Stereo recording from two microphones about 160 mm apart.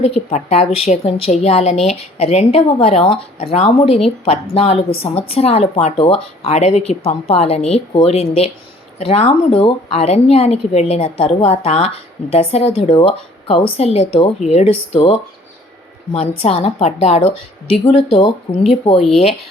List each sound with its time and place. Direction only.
0.0 s a woman's voice: 40° left (ahead or behind)
16.1 s a woman's voice: 40° left (ahead or behind)